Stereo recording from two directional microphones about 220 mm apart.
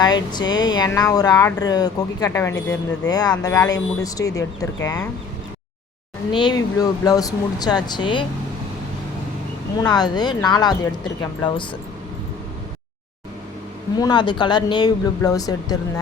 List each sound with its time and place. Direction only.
0.0 s speech: 20° left (ahead or behind)
6.3 s speech: 20° left (ahead or behind)
9.7 s speech: 20° left (ahead or behind)
14.0 s speech: 20° left (ahead or behind)